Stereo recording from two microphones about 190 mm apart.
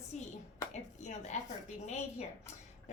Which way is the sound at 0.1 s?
35° left (ahead or behind).